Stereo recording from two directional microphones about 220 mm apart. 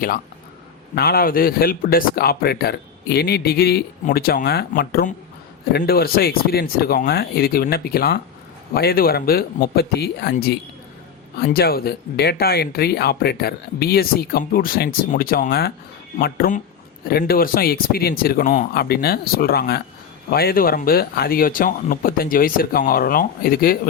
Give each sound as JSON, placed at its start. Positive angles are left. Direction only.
{"t": 0.9, "sound": "speech", "side_deg": 45}